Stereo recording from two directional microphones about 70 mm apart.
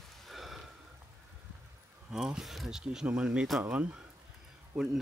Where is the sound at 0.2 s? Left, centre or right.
Centre.